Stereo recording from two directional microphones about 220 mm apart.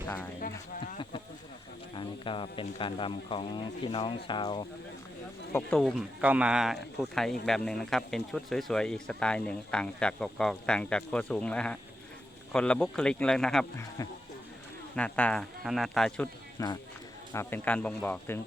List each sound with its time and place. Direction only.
2.0 s speech: 25° left (ahead or behind)
5.5 s speech: centre (ahead or behind)
14.9 s speech: 5° left (ahead or behind)